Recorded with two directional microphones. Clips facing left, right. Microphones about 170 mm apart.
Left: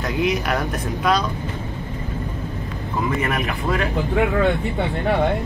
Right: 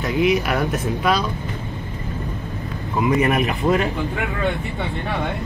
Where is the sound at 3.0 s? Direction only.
20° right (ahead or behind).